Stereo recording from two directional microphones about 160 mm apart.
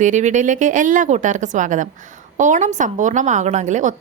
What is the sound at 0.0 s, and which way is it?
A woman's voice, 50° right (ahead or behind).